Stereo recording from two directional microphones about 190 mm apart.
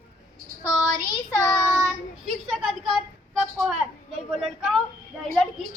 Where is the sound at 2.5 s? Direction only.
Centre (ahead or behind).